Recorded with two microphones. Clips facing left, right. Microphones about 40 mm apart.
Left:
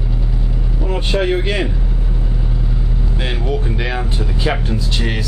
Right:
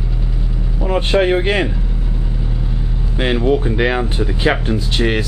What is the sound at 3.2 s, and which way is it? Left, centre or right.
Speech, right.